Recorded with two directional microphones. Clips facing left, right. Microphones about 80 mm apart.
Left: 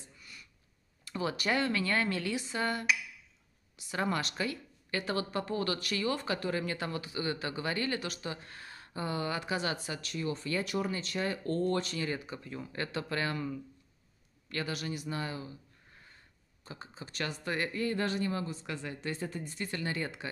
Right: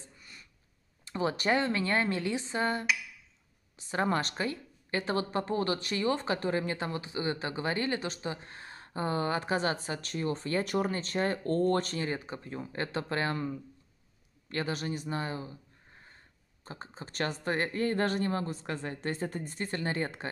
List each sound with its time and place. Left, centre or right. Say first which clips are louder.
0.0 s a sound: right 1 dB; right
1.0 s a woman's voice: right 3 dB; right
14.5 s a woman's voice: right 3 dB; right